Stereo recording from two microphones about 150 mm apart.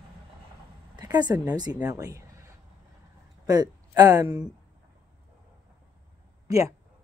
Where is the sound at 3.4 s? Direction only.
25° right (ahead or behind).